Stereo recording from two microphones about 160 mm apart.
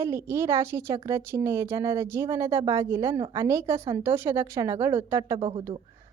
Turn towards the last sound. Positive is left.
turn(degrees=-20)  # may be behind; listen again after turning